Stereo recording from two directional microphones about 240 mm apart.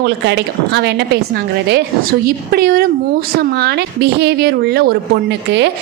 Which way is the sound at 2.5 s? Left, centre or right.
Right.